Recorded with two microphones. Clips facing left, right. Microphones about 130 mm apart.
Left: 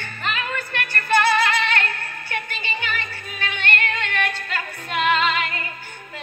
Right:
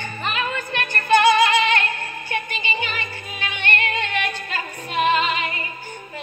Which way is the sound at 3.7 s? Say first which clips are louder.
Right 3 dB; 55° left (ahead or behind).